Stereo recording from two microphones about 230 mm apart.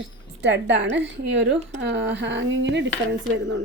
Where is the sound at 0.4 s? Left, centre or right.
Right.